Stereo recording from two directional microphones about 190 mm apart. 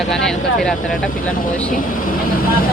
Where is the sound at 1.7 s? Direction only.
45° left (ahead or behind).